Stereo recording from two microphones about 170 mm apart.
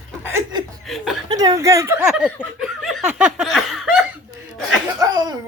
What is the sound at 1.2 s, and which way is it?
Speech, 20° right (ahead or behind).